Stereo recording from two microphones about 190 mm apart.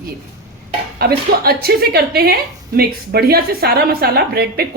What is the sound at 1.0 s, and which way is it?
A woman's voice, 55° right (ahead or behind).